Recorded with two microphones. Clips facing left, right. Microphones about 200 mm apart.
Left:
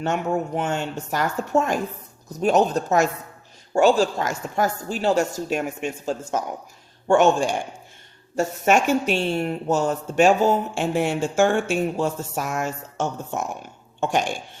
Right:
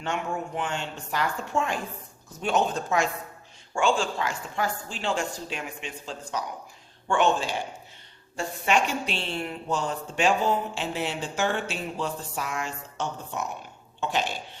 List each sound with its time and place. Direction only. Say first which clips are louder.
0.0 s a woman's voice: left 7 dB; 45° left (ahead or behind)